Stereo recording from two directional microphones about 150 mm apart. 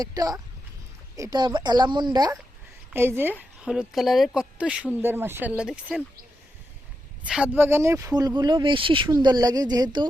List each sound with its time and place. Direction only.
0.0 s speech: 25° right (ahead or behind)
2.9 s speech: 15° right (ahead or behind)
7.2 s speech: 5° right (ahead or behind); by 9.1 s 35° right (ahead or behind)
9.2 s speech: 25° right (ahead or behind)